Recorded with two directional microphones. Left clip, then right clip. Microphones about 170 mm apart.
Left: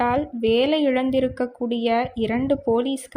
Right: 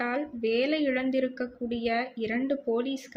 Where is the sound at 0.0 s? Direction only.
40° left (ahead or behind).